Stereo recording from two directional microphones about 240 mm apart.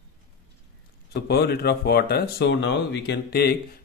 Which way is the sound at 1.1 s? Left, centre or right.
Left.